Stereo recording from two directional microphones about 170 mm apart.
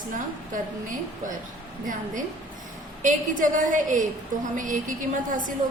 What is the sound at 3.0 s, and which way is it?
A woman's voice, 50° right (ahead or behind).